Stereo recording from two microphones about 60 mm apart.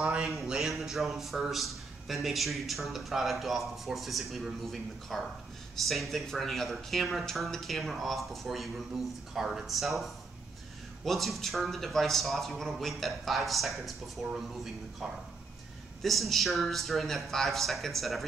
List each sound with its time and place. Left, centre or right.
0.0 s speech: centre
0.3 s a man's voice: centre